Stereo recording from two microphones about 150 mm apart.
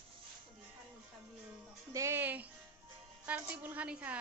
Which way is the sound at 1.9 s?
15° right (ahead or behind).